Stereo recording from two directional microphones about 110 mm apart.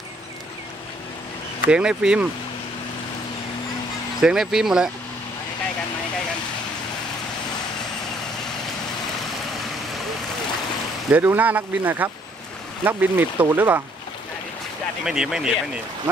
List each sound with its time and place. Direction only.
1.7 s speech: 10° right (ahead or behind)
4.2 s speech: 5° right (ahead or behind)
11.1 s speech: 15° right (ahead or behind)
15.0 s speech: 5° right (ahead or behind)